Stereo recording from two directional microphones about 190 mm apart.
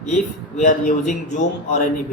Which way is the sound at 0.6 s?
45° left (ahead or behind).